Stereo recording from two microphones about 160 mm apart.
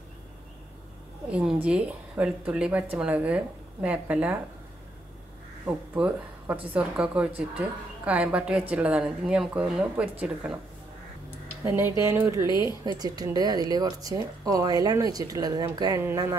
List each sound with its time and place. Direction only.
1.3 s a woman's voice: 5° right (ahead or behind)
5.7 s a woman's voice: 5° right (ahead or behind)
11.6 s a woman's voice: 15° right (ahead or behind)